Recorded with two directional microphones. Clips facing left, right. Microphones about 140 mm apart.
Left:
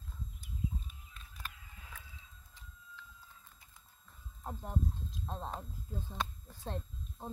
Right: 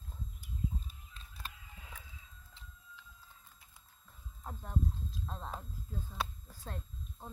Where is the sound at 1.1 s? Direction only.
25° right (ahead or behind).